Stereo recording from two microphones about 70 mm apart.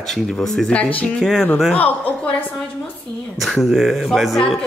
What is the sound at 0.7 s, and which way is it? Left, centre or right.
Speech, centre.